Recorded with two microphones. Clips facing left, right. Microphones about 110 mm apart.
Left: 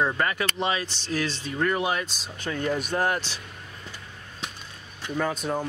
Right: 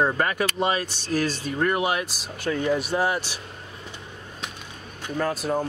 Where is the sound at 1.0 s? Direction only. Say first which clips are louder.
Right 4 dB; 45° right (ahead or behind).